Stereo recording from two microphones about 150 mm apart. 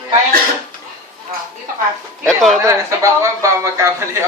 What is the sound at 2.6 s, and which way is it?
Speech, 20° right (ahead or behind).